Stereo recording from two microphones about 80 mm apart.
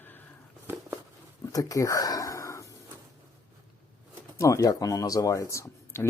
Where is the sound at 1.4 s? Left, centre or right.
Left.